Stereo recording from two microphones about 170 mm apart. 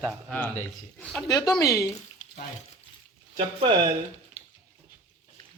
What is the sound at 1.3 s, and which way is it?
Speech, 20° left (ahead or behind).